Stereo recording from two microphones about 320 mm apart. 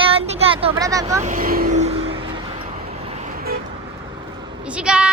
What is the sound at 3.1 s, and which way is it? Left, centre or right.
Vehicle, right.